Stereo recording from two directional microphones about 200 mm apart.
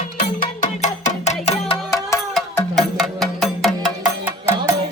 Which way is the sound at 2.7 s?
Centre (ahead or behind).